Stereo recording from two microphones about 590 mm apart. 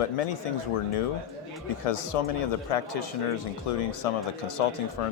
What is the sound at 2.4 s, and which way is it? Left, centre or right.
Speech, left.